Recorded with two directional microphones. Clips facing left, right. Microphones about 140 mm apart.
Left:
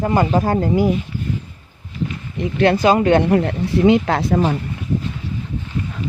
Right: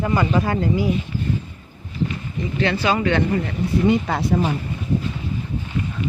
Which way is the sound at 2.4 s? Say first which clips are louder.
Left 7 dB; 60° left (ahead or behind).